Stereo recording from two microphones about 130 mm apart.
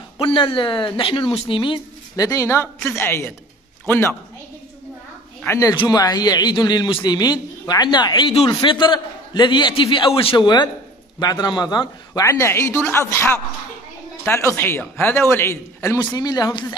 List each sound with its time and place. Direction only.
0.2 s a man's voice: 40° left (ahead or behind)
2.1 s a man's voice: 25° left (ahead or behind)
5.4 s a man's voice: 20° left (ahead or behind)